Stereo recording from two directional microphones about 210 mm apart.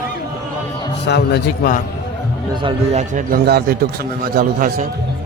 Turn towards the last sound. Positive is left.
turn(degrees=-45)  # may be behind; listen again after turning